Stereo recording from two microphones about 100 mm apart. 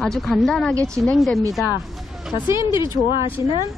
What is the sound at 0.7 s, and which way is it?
Speech, 30° right (ahead or behind).